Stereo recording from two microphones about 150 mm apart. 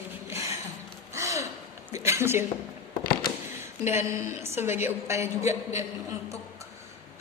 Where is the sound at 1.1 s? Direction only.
20° right (ahead or behind).